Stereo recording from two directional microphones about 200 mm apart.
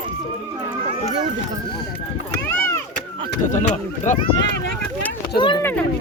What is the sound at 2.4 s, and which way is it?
Chop, 15° left (ahead or behind).